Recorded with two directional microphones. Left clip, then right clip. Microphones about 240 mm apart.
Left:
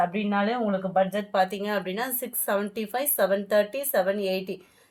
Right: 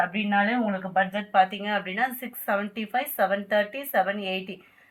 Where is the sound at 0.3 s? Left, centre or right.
Left.